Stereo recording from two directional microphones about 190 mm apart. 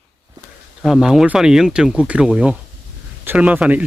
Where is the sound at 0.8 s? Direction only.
Centre (ahead or behind).